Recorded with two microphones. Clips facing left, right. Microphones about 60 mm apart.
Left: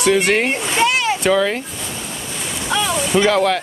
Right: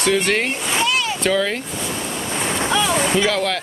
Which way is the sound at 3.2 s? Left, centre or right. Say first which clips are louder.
Left 4 dB; centre.